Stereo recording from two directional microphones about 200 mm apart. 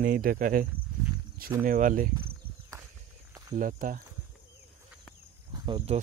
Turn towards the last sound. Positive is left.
turn(degrees=-25)  # may be behind; listen again after turning